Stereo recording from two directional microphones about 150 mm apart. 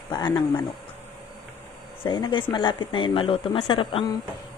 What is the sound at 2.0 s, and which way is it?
Speech, 30° left (ahead or behind).